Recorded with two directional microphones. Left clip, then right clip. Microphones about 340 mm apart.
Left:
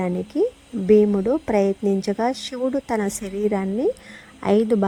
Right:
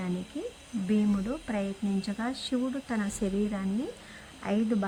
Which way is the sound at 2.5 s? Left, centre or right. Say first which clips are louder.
Left 9 dB; centre.